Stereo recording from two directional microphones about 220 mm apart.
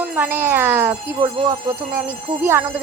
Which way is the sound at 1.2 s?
20° right (ahead or behind).